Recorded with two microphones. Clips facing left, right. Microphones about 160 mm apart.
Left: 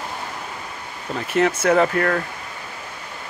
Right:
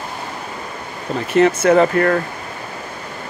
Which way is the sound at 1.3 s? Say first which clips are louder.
Right 5 dB; 5° left (ahead or behind).